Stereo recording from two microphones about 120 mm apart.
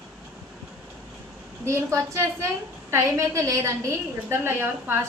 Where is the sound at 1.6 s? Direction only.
25° right (ahead or behind).